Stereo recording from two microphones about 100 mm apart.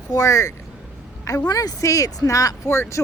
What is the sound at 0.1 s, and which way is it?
Speech, 35° left (ahead or behind).